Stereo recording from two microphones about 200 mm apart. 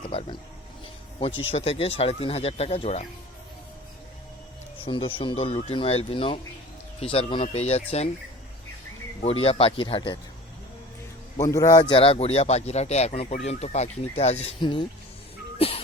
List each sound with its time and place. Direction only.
0.1 s a sound: 25° left (ahead or behind)
1.5 s a man's voice: 30° left (ahead or behind)
4.9 s speech: 25° left (ahead or behind)
9.2 s speech: 30° left (ahead or behind)
11.3 s a man's voice: 15° left (ahead or behind)
15.5 s cat: 30° left (ahead or behind)